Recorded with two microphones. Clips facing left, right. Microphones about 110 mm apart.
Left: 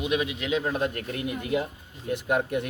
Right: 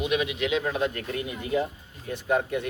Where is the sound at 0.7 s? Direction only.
50° left (ahead or behind).